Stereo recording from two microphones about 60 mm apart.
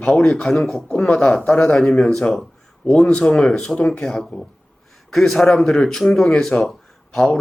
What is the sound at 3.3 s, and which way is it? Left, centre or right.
Speech, centre.